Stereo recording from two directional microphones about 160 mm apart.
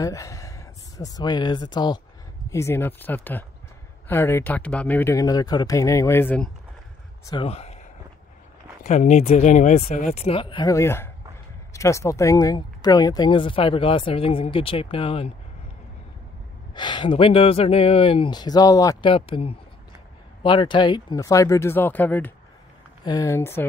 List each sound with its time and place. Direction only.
0.0 s speech: 20° left (ahead or behind)
7.4 s speech: 40° left (ahead or behind)
8.8 s speech: 45° left (ahead or behind); by 10.7 s 30° left (ahead or behind)
10.7 s speech: 15° left (ahead or behind); by 15.3 s 35° left (ahead or behind)
16.7 s speech: 30° left (ahead or behind)
19.0 s speech: 35° left (ahead or behind); by 22.3 s 10° left (ahead or behind)
23.0 s speech: 20° left (ahead or behind)